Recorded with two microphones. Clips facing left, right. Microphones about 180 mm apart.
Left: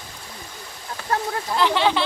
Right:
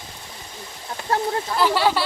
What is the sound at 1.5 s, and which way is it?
Speech, 5° right (ahead or behind).